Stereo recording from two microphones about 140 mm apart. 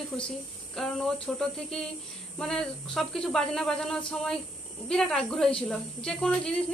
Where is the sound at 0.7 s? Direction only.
5° left (ahead or behind).